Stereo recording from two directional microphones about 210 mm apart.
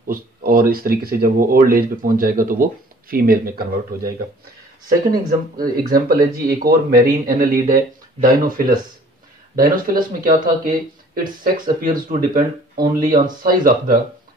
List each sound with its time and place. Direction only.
0.1 s speech: 45° right (ahead or behind)